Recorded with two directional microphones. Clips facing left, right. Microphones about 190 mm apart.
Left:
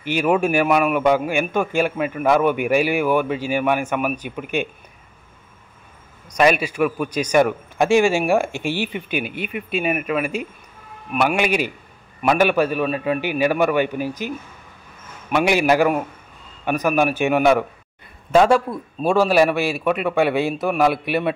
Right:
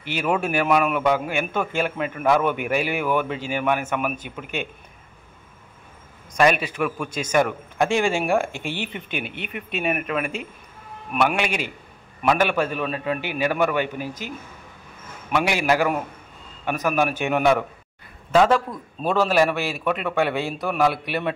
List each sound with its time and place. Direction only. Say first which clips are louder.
0.0 s a man's voice: left 5 dB; 15° left (ahead or behind)
6.3 s a man's voice: left 2 dB; 10° left (ahead or behind)
15.3 s a man's voice: left 4 dB; 15° left (ahead or behind)